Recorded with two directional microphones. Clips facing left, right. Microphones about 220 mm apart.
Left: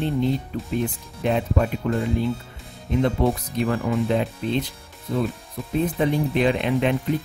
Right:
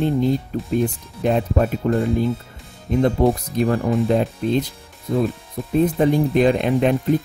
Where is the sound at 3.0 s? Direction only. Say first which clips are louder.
Right 4 dB; 40° right (ahead or behind).